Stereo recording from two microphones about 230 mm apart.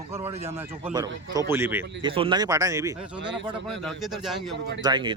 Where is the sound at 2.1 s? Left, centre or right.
Right.